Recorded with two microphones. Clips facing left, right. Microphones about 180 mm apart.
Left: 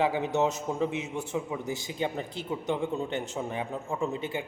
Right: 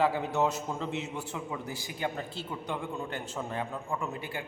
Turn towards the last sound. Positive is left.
turn(degrees=20)  # may be behind; listen again after turning